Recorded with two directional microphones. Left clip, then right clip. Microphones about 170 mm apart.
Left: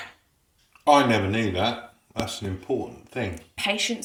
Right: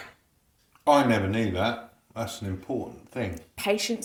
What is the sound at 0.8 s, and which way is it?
Speech, centre (ahead or behind).